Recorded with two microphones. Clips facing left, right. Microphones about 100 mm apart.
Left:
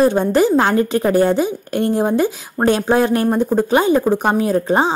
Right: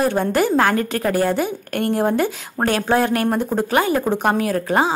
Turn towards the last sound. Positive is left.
turn(degrees=20)  # may be behind; listen again after turning